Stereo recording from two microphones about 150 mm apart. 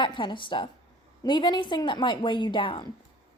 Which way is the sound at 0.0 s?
30° left (ahead or behind).